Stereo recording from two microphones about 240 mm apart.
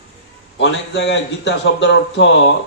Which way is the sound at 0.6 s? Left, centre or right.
Left.